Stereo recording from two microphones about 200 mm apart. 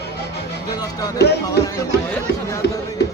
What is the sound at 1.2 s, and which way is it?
Speech, 55° left (ahead or behind).